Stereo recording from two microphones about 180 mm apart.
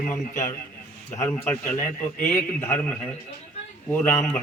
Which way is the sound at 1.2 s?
10° left (ahead or behind).